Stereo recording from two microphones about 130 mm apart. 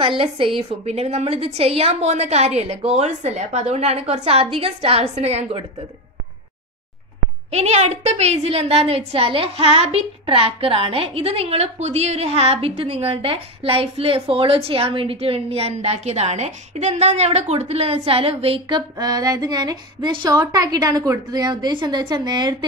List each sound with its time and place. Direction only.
0.6 s a woman's voice: 55° right (ahead or behind)
7.5 s a woman's voice: 60° right (ahead or behind); by 22.7 s 35° right (ahead or behind)